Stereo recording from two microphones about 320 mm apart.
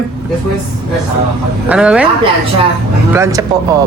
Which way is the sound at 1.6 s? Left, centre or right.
Centre.